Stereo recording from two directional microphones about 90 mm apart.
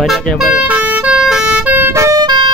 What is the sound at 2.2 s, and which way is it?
Music, 60° right (ahead or behind).